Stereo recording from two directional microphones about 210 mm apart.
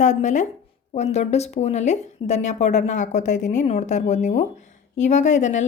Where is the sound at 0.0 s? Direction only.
35° left (ahead or behind).